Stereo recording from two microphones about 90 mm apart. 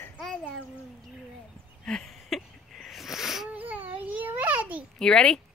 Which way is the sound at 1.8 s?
5° left (ahead or behind).